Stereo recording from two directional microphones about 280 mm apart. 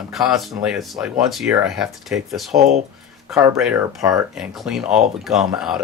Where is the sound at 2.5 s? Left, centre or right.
Right.